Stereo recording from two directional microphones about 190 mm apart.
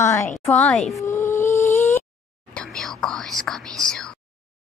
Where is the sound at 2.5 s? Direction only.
Centre (ahead or behind).